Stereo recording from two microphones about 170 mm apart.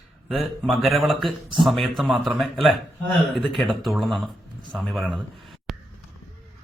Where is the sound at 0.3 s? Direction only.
Centre (ahead or behind).